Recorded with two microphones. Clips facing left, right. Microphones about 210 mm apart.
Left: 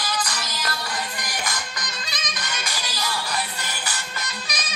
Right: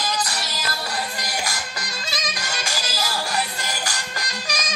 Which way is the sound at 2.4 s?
40° right (ahead or behind).